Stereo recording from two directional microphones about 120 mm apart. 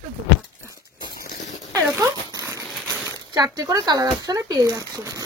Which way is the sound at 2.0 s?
25° right (ahead or behind).